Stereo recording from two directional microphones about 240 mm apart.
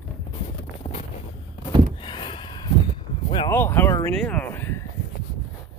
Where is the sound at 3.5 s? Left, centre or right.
Centre.